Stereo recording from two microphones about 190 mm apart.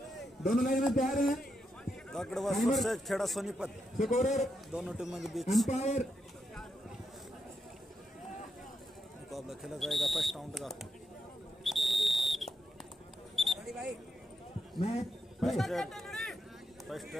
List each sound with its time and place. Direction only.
0.4 s a man's voice: centre (ahead or behind)
0.9 s a sound: 45° left (ahead or behind)
2.0 s speech: 5° left (ahead or behind)
4.0 s speech: 40° left (ahead or behind)
4.7 s speech: 5° right (ahead or behind)
5.7 s speech: 40° left (ahead or behind)
9.3 s speech: centre (ahead or behind)
11.6 s whistle: centre (ahead or behind)
13.4 s single-lens reflex camera: centre (ahead or behind)
14.8 s speech: 35° left (ahead or behind)
15.4 s speech: centre (ahead or behind)